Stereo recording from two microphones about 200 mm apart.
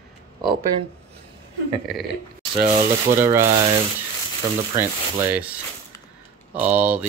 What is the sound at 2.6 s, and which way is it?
Rub, 40° right (ahead or behind).